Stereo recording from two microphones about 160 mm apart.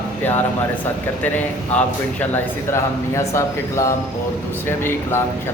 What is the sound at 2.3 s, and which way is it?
Speech, 15° left (ahead or behind).